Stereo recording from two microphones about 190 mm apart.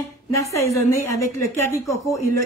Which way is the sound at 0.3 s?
15° left (ahead or behind).